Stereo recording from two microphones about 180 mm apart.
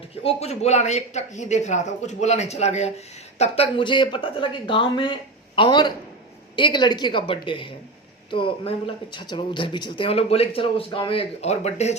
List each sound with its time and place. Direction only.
0.2 s speech: 35° left (ahead or behind)